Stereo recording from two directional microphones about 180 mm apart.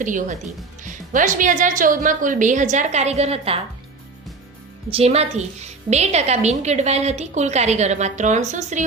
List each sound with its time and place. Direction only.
0.0 s a woman's voice: 45° right (ahead or behind)
4.9 s a woman's voice: 35° right (ahead or behind)